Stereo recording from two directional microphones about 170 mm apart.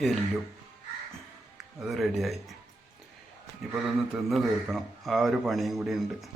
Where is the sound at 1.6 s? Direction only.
Centre (ahead or behind).